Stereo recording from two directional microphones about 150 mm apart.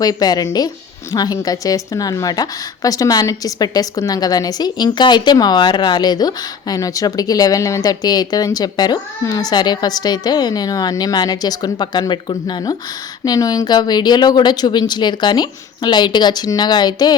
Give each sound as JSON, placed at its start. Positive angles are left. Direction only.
{"t": 0.0, "sound": "a woman's voice", "side_deg": 25}